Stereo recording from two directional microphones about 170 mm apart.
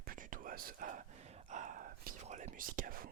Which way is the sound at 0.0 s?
55° right (ahead or behind).